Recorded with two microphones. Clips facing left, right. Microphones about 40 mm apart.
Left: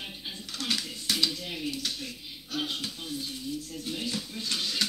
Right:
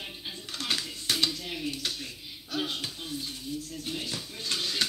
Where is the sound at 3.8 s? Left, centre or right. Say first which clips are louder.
Left 2 dB; right.